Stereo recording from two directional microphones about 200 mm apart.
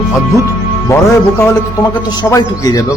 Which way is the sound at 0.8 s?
15° left (ahead or behind).